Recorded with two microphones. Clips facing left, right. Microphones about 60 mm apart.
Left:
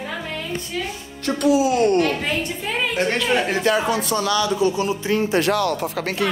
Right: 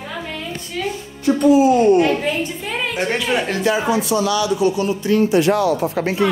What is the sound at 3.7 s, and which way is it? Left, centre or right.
Speech, left.